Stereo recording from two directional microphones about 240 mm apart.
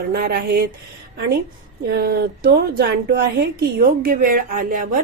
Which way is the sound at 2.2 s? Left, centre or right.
Right.